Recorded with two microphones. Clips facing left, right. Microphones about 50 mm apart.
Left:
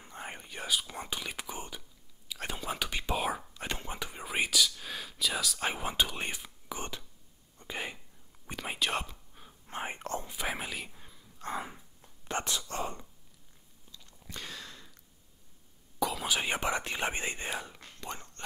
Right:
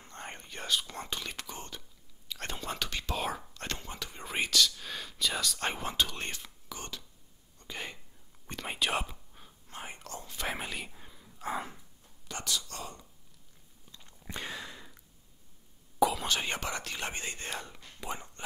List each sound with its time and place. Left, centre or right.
0.0 s whispering: centre
7.5 s a sound: centre
8.5 s whispering: centre
9.7 s whispering: left
10.2 s whispering: centre
10.5 s whispering: centre
12.3 s whispering: left
13.9 s a sound: right
16.0 s whispering: centre
18.0 s a sound: centre